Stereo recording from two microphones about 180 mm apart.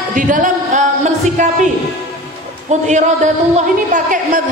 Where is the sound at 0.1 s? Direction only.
45° right (ahead or behind).